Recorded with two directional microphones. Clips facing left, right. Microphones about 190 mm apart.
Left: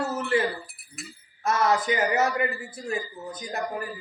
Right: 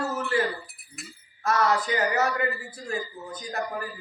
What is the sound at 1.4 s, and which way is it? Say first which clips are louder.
Speech: left 1 dB; 20° left (ahead or behind).